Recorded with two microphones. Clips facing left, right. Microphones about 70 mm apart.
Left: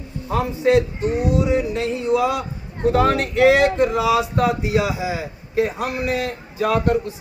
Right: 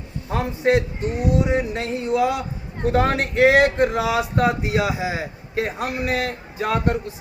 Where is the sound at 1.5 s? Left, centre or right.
Right.